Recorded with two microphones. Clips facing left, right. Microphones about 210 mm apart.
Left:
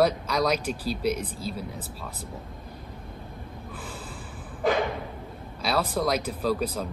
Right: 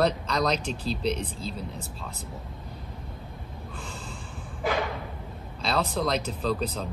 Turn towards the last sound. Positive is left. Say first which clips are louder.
# left 2 dB
turn(degrees=10)  # may be behind; listen again after turning